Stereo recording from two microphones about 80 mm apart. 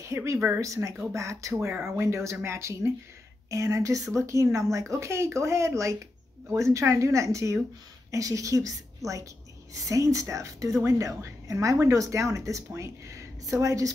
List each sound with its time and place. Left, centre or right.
0.0 s a woman's voice: right